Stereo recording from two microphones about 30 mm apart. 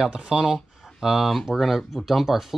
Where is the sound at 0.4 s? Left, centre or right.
Centre.